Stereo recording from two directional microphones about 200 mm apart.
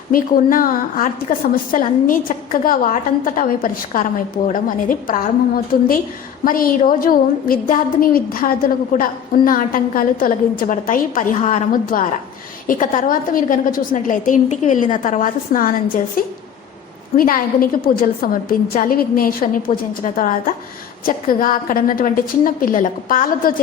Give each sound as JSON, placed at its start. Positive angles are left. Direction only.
{"t": 0.1, "sound": "a woman's voice", "side_deg": 45}